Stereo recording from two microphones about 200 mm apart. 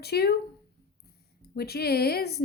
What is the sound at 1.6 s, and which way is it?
Speech, 50° left (ahead or behind).